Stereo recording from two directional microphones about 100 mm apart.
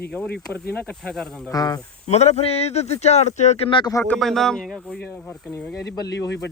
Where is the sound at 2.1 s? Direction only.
90° left.